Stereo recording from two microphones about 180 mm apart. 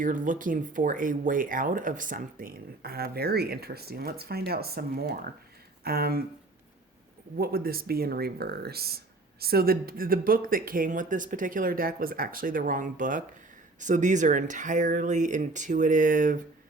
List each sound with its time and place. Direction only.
0.0 s speech: 45° right (ahead or behind)
7.3 s speech: 55° right (ahead or behind)